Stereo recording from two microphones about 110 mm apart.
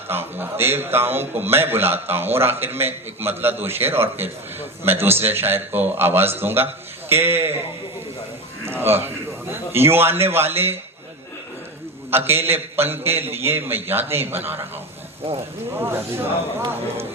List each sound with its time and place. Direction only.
0.1 s a man's voice: 20° right (ahead or behind)
8.6 s a man's voice: 20° right (ahead or behind)
12.1 s a man's voice: 20° right (ahead or behind)
15.7 s a man's voice: 25° right (ahead or behind)